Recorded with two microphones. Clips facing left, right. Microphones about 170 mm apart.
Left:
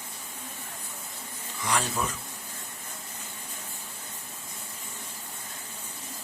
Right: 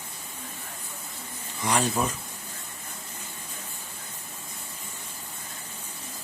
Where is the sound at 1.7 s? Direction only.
20° right (ahead or behind).